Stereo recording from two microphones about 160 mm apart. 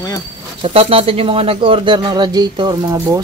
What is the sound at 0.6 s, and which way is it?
Speech, 40° right (ahead or behind).